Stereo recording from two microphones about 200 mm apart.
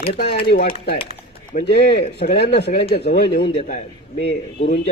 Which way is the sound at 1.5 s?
40° left (ahead or behind).